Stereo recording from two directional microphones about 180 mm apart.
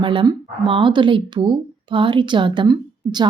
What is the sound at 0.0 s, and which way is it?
Speech, 25° right (ahead or behind).